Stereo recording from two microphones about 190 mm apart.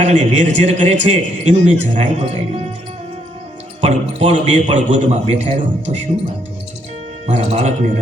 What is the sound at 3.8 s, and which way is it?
A man's voice, 35° right (ahead or behind).